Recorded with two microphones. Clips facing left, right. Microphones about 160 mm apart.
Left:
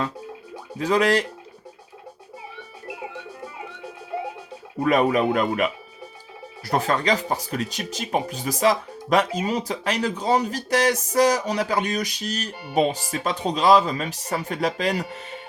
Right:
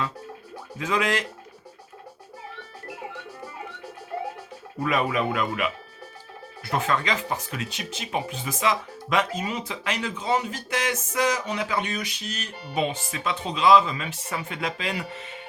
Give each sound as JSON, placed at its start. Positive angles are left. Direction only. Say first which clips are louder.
{"t": 0.8, "sound": "speech", "louder": "left 6 dB", "side_deg": 35}
{"t": 4.8, "sound": "speech", "louder": "left 5 dB", "side_deg": 35}